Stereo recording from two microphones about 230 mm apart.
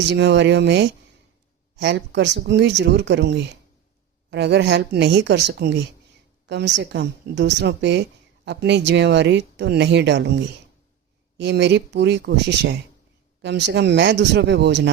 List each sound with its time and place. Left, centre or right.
0.0 s speech: right
11.3 s speech: right